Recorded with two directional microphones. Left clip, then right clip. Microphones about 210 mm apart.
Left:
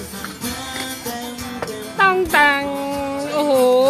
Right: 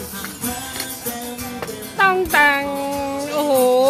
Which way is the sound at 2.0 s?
5° left (ahead or behind).